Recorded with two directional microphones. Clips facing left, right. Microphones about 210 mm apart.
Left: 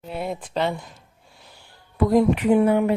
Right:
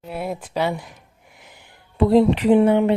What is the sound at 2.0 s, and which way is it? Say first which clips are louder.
Speech: right 3 dB; 30° right (ahead or behind).